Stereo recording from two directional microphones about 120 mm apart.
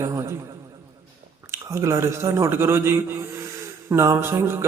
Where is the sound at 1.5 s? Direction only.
25° right (ahead or behind).